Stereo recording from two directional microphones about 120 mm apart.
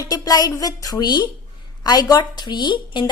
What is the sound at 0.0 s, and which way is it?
A woman's voice, 30° left (ahead or behind).